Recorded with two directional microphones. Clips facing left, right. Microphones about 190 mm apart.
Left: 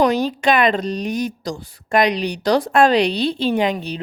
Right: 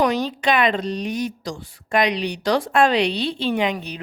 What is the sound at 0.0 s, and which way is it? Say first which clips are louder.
Speech: left 3 dB; 45° left (ahead or behind).